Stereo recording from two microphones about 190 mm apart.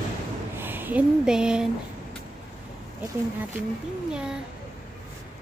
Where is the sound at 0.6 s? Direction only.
10° right (ahead or behind).